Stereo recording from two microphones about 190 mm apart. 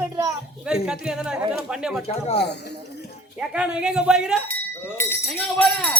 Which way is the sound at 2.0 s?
35° left (ahead or behind).